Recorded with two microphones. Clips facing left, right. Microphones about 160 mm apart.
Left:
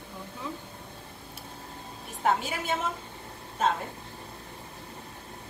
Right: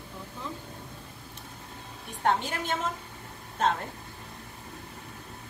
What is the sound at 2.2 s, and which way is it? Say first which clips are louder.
Speech: even; 5° left (ahead or behind).